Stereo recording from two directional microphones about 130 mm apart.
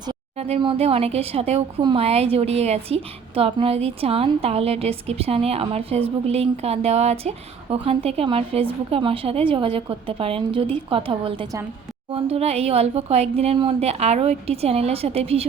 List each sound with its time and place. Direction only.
0.3 s a woman's voice: 55° right (ahead or behind)
1.8 s a woman's voice: 35° right (ahead or behind)
2.0 s a woman's voice: 50° right (ahead or behind)
12.1 s a woman's voice: 50° right (ahead or behind)